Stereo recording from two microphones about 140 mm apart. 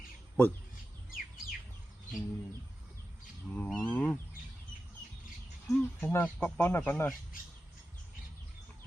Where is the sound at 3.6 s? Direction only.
10° left (ahead or behind).